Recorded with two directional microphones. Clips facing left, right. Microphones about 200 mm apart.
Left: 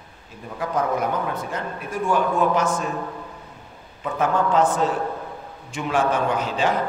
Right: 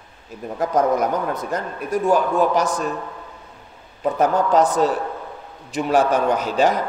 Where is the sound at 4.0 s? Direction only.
40° right (ahead or behind).